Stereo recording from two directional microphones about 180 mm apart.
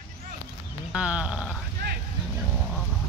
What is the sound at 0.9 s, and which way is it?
Speech, 5° right (ahead or behind).